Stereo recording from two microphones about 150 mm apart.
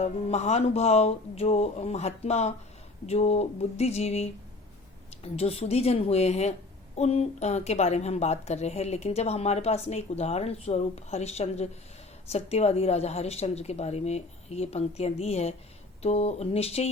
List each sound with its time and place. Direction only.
0.0 s a woman's voice: 50° left (ahead or behind)